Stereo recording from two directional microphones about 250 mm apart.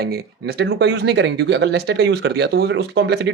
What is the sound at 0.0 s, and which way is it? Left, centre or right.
Speech, right.